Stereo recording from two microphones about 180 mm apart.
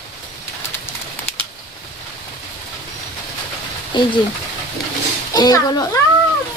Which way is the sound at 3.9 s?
25° left (ahead or behind).